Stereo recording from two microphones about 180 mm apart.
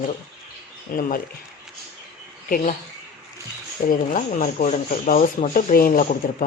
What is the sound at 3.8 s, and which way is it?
Speech, 45° left (ahead or behind).